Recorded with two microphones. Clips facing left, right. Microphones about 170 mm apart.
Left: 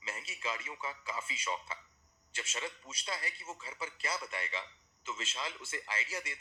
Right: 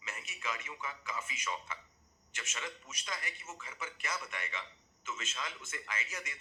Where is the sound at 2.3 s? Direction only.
30° left (ahead or behind).